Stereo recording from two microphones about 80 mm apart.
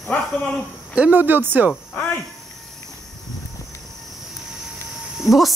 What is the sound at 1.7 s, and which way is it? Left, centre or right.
Music, centre.